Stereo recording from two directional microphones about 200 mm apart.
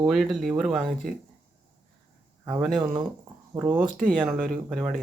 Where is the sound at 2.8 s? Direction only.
20° right (ahead or behind).